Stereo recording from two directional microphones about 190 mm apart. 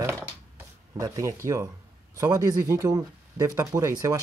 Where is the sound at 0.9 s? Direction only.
20° right (ahead or behind).